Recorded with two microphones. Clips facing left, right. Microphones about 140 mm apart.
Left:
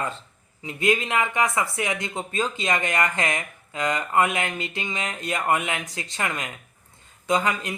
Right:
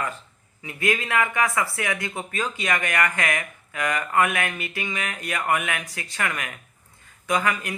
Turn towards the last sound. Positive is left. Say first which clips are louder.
# left 1 dB
turn(degrees=20)  # may be behind; listen again after turning